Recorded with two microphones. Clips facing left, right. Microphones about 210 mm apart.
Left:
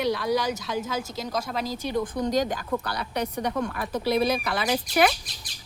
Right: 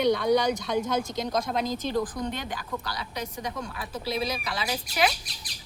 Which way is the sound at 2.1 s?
40° left (ahead or behind).